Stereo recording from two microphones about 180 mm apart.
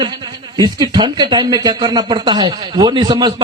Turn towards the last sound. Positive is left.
turn(degrees=-25)  # may be behind; listen again after turning